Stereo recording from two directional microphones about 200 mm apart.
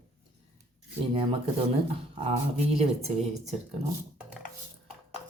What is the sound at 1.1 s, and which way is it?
Speech, 25° right (ahead or behind).